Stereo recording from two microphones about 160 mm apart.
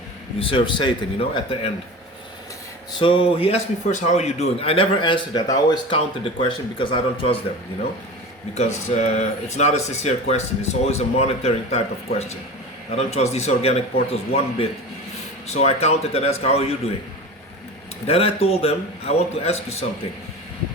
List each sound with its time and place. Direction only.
0.3 s a man's voice: 35° left (ahead or behind)
3.0 s a man's voice: 35° left (ahead or behind)
8.5 s speech: 45° left (ahead or behind)
12.9 s a man's voice: 40° left (ahead or behind)
18.0 s a man's voice: 40° left (ahead or behind)